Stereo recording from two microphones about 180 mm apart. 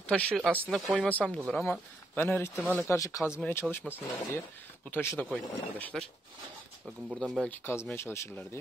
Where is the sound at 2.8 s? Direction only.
20° left (ahead or behind).